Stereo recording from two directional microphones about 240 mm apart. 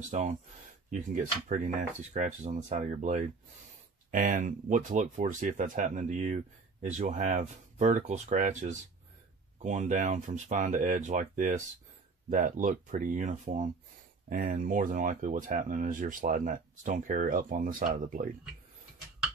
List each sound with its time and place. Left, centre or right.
0.1 s speech: right